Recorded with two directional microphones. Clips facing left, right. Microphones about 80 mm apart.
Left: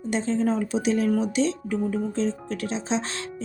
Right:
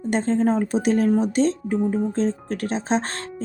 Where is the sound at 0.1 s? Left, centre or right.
Right.